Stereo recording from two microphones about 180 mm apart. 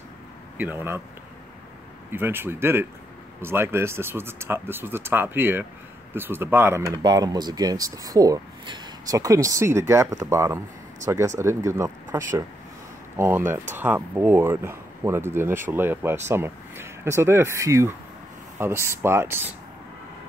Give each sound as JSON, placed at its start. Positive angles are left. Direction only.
{"t": 0.6, "sound": "speech", "side_deg": -10}
{"t": 2.0, "sound": "speech", "side_deg": -10}